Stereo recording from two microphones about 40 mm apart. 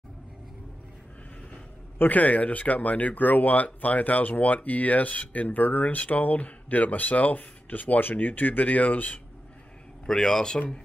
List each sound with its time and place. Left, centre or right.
2.0 s speech: left
10.2 s speech: centre